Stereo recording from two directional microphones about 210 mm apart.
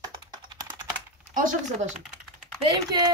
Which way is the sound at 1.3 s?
40° right (ahead or behind).